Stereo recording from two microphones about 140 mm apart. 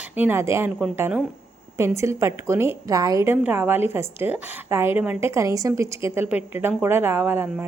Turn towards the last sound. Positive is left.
turn(degrees=-15)  # may be behind; listen again after turning